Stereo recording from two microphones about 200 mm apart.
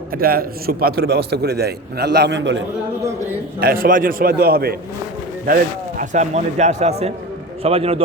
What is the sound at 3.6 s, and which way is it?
A man's voice, 45° right (ahead or behind).